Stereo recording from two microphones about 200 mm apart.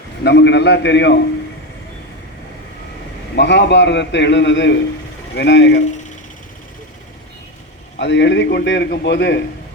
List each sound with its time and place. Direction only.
0.3 s a man's voice: 60° left (ahead or behind)
3.3 s a man's voice: 60° left (ahead or behind)
7.9 s a man's voice: 60° left (ahead or behind)